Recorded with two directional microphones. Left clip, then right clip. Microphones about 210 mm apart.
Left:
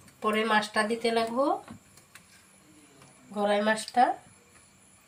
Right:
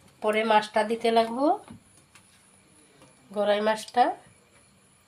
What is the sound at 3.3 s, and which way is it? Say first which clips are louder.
Speech: right 2 dB; 50° right (ahead or behind).